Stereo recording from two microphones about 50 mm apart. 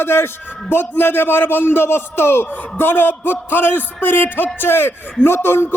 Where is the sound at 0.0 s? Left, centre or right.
Left.